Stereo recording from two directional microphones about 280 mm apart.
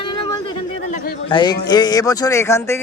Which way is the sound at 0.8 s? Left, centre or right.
Left.